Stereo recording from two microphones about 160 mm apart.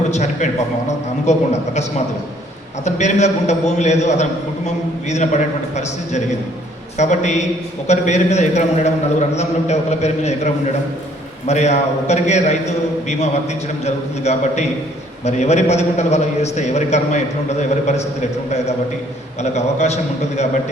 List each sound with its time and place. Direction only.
0.1 s a man's voice: 50° left (ahead or behind)
19.4 s a man's voice: 45° left (ahead or behind)